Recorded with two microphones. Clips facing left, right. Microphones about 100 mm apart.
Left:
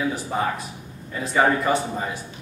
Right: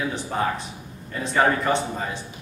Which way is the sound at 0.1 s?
5° left (ahead or behind).